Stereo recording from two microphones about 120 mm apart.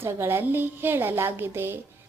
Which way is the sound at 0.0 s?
20° right (ahead or behind).